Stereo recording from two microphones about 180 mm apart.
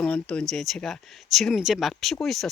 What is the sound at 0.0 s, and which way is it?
Speech, 5° left (ahead or behind).